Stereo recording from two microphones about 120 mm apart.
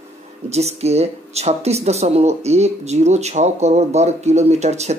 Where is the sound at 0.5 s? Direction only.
60° right (ahead or behind).